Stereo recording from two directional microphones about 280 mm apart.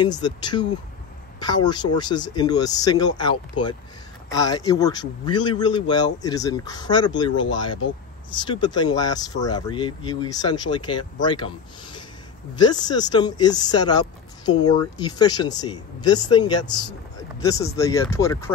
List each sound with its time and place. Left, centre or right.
0.0 s speech: centre
4.3 s speech: centre